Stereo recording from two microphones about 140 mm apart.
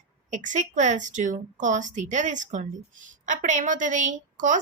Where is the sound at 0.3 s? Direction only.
60° right (ahead or behind).